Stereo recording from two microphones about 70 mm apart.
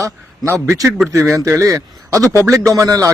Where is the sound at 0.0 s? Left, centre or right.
Right.